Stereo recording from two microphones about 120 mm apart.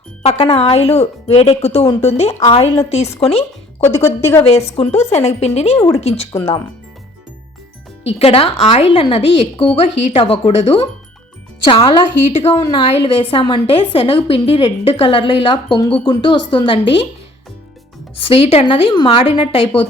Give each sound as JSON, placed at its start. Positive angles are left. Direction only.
{"t": 0.2, "sound": "speech", "side_deg": 60}
{"t": 2.5, "sound": "a woman's voice", "side_deg": 45}
{"t": 2.9, "sound": "speech", "side_deg": 60}
{"t": 3.8, "sound": "speech", "side_deg": 20}
{"t": 4.8, "sound": "speech", "side_deg": 60}
{"t": 8.0, "sound": "speech", "side_deg": 55}
{"t": 11.6, "sound": "a woman's voice", "side_deg": 45}
{"t": 12.3, "sound": "speech", "side_deg": 60}
{"t": 12.9, "sound": "a woman's voice", "side_deg": 50}
{"t": 18.2, "sound": "a woman's voice", "side_deg": 50}